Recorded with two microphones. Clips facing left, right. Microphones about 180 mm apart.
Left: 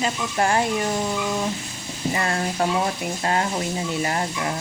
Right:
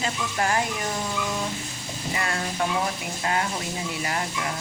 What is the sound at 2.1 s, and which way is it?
Speech, 35° left (ahead or behind).